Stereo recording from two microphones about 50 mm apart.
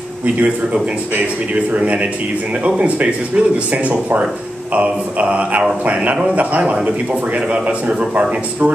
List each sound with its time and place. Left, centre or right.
1.1 s speech: right